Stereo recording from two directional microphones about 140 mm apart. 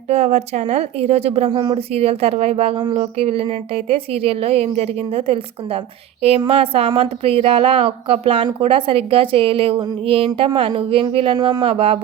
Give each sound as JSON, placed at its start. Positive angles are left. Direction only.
{"t": 0.1, "sound": "a woman's voice", "side_deg": -50}